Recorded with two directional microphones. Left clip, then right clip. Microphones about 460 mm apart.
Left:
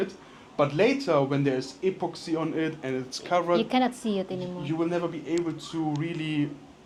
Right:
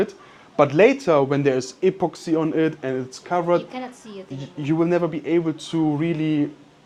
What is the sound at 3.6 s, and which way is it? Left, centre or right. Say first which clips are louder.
Speech: left 3 dB; left.